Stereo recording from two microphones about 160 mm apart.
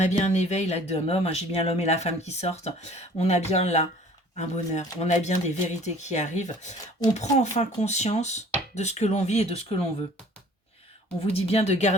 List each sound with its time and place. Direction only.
0.0 s speech: 45° left (ahead or behind)
11.2 s speech: 40° left (ahead or behind)